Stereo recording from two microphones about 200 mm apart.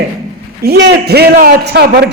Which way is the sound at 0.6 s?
55° right (ahead or behind).